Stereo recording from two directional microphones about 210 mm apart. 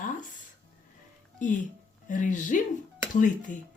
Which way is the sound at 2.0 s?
40° left (ahead or behind).